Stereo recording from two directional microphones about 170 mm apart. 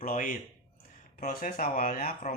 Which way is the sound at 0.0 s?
55° left (ahead or behind).